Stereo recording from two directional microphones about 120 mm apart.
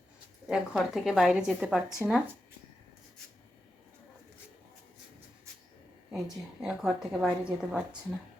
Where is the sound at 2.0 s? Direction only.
15° right (ahead or behind).